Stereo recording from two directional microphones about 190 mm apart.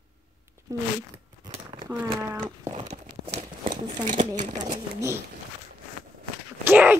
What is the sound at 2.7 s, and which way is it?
Crumpling, 35° right (ahead or behind).